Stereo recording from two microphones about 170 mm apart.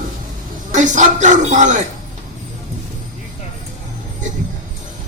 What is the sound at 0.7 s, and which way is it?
Speech, 45° right (ahead or behind).